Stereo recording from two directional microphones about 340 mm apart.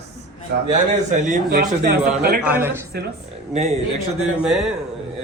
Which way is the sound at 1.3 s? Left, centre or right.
Right.